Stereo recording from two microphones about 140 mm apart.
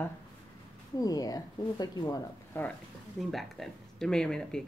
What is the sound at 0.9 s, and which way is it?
Speech, 25° left (ahead or behind).